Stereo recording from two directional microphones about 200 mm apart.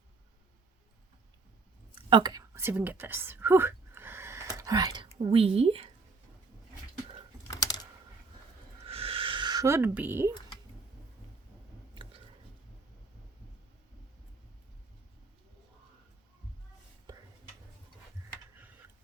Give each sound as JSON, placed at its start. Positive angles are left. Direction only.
{"t": 2.0, "sound": "whispering", "side_deg": -25}
{"t": 7.5, "sound": "typing", "side_deg": 20}
{"t": 8.9, "sound": "a sound", "side_deg": -30}